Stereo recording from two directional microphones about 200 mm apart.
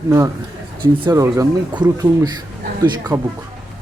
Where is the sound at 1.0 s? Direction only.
15° right (ahead or behind).